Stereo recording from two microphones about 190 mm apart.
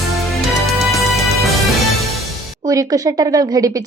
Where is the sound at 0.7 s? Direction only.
Centre (ahead or behind).